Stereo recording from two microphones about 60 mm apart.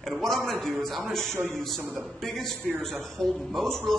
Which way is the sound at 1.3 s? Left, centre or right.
Right.